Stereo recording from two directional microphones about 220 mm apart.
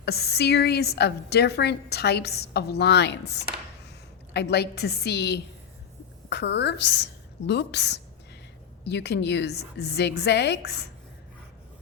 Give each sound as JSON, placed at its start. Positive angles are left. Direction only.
{"t": 0.0, "sound": "a woman's voice", "side_deg": 45}